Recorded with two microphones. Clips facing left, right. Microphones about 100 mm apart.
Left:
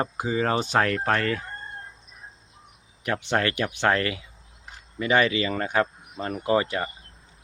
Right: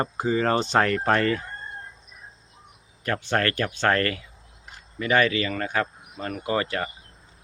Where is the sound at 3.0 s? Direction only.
15° left (ahead or behind).